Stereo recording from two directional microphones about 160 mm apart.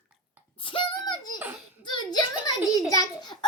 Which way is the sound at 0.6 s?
30° left (ahead or behind).